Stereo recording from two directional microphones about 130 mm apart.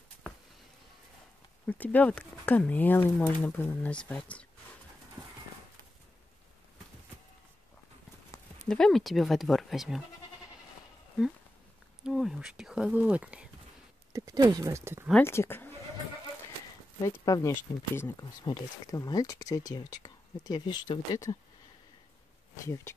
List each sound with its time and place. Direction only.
1.7 s speech: 10° left (ahead or behind)
8.6 s speech: 5° left (ahead or behind)
12.0 s speech: centre (ahead or behind)
14.1 s speech: 30° right (ahead or behind)
15.2 s speech: 20° left (ahead or behind)
17.0 s speech: 30° left (ahead or behind)
18.4 s speech: 30° left (ahead or behind)
22.6 s speech: 20° left (ahead or behind)